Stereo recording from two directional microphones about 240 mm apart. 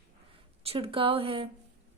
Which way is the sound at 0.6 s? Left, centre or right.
Right.